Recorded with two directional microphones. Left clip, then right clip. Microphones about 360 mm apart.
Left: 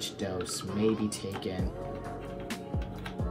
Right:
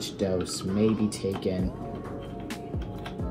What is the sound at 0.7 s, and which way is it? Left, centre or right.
Speech, centre.